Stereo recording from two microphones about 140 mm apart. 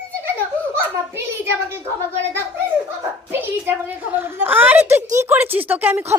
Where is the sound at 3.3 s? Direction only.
15° right (ahead or behind).